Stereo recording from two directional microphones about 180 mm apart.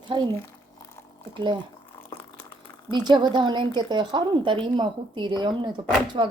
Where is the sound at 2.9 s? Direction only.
25° right (ahead or behind).